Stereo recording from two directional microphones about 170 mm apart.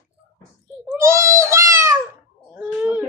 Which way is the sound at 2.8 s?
10° right (ahead or behind).